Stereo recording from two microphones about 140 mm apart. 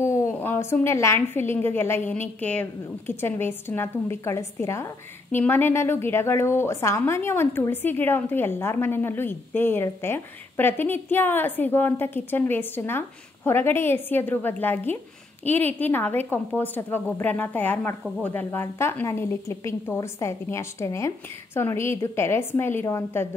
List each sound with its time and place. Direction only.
0.0 s a woman's voice: 20° left (ahead or behind)